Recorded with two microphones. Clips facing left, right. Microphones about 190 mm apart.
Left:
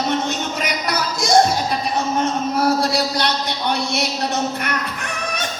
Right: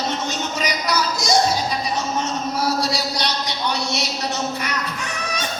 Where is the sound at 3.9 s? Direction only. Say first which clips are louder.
Left 3 dB; 55° left (ahead or behind).